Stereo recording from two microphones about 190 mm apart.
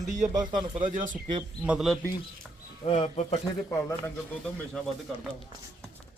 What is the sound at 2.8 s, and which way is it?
Speech, 30° left (ahead or behind).